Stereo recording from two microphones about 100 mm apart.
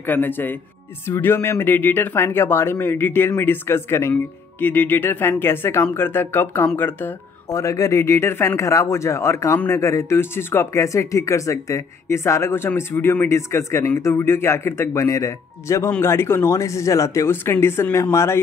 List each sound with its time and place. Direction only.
0.0 s speech: 20° left (ahead or behind)
7.5 s speech: 35° left (ahead or behind)